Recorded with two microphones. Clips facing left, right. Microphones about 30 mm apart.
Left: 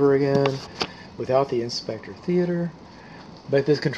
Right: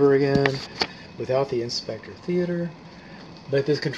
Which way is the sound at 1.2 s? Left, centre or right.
Centre.